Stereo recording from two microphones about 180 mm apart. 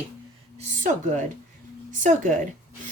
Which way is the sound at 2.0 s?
45° right (ahead or behind).